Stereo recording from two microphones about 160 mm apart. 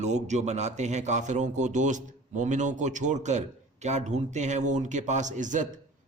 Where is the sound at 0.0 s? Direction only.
45° right (ahead or behind).